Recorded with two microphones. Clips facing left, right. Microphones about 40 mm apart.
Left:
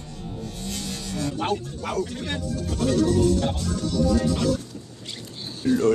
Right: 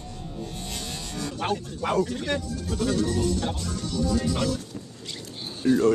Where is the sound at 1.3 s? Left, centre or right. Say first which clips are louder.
Left 1 dB; centre.